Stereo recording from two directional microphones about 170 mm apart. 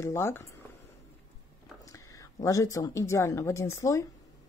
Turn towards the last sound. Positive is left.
turn(degrees=15)  # may be behind; listen again after turning